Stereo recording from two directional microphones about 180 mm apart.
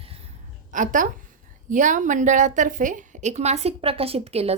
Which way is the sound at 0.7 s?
45° right (ahead or behind).